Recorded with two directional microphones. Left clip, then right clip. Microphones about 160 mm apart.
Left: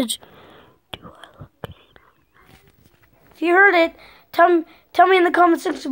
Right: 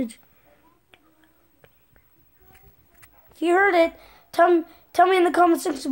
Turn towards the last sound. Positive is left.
turn(degrees=-5)  # may be behind; listen again after turning